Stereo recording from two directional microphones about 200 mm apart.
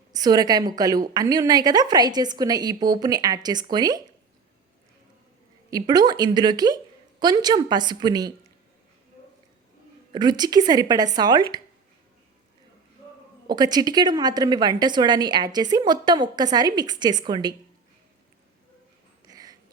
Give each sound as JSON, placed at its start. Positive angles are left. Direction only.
{"t": 0.1, "sound": "a woman's voice", "side_deg": -20}
{"t": 5.7, "sound": "a woman's voice", "side_deg": -20}
{"t": 10.1, "sound": "a woman's voice", "side_deg": -20}
{"t": 13.5, "sound": "a woman's voice", "side_deg": -20}
{"t": 19.3, "sound": "a sound", "side_deg": -20}